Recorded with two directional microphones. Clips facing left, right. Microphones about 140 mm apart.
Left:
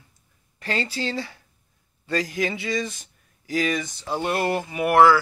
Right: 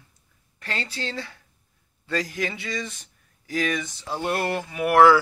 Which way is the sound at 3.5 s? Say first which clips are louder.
Left 2 dB; 5° left (ahead or behind).